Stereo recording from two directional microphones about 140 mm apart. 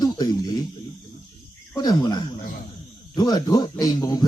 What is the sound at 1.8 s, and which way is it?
A man's voice, 30° left (ahead or behind).